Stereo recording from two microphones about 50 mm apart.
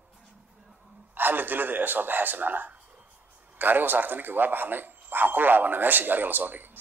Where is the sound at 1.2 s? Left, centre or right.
Right.